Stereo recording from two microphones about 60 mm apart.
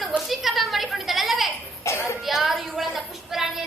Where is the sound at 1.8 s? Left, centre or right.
Left.